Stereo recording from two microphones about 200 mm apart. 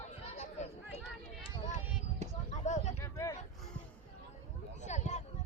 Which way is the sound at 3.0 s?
15° left (ahead or behind).